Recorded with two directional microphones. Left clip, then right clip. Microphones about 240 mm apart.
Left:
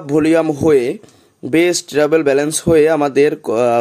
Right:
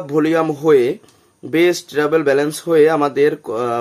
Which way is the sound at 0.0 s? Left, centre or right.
Left.